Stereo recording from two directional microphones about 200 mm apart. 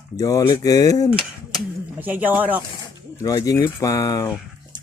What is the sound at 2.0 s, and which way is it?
Speech, 10° right (ahead or behind).